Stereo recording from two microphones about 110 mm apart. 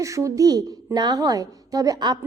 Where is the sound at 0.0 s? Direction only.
30° right (ahead or behind).